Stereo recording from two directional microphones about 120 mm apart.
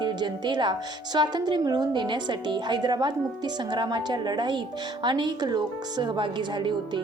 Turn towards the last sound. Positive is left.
turn(degrees=-40)  # may be behind; listen again after turning